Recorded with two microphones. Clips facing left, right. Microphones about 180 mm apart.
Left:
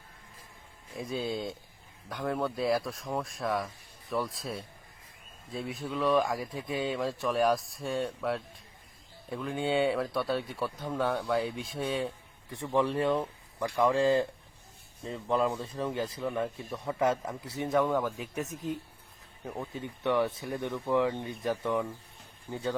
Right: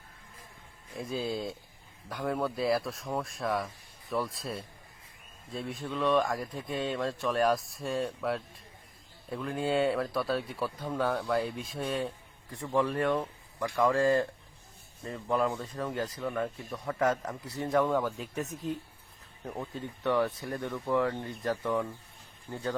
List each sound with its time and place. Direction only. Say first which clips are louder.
0.9 s speech: even; centre (ahead or behind)
12.6 s speech: left 1 dB; 25° left (ahead or behind)
13.0 s speech: left 1 dB; 5° left (ahead or behind)
15.0 s speech: left 1 dB; 15° left (ahead or behind)
15.5 s speech: left 1 dB; 5° left (ahead or behind)
20.5 s speech: left 1 dB; 15° left (ahead or behind)